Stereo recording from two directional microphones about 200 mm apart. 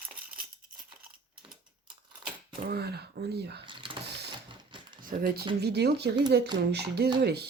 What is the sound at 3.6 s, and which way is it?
Cash register, 25° right (ahead or behind).